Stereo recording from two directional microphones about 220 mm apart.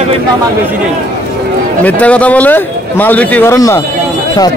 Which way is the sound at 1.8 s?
5° left (ahead or behind).